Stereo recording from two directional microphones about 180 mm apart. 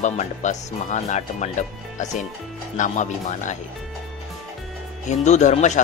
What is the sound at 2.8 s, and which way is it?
Speech, 40° left (ahead or behind).